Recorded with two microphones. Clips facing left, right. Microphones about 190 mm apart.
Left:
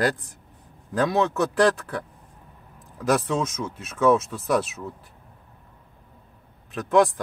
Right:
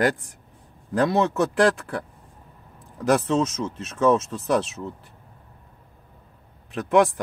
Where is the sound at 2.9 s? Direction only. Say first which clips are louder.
Right 2 dB; centre (ahead or behind).